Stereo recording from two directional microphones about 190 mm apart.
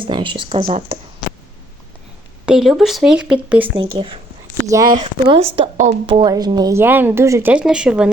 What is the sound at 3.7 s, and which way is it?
Speech, 30° right (ahead or behind).